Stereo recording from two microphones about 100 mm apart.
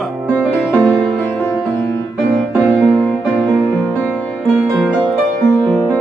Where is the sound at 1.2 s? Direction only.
25° left (ahead or behind).